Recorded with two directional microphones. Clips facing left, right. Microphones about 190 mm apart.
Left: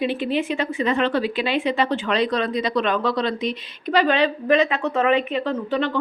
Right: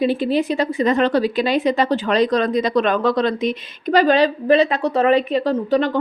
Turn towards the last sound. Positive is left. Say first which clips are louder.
# right 5 dB
turn(degrees=-40)  # may be behind; listen again after turning